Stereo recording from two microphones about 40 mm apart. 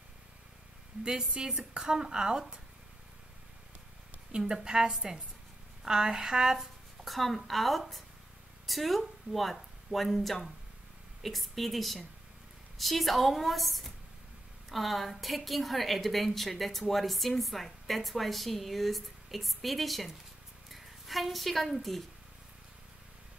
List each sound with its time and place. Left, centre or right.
1.0 s a woman's voice: centre
4.4 s speech: centre
7.1 s a woman's voice: centre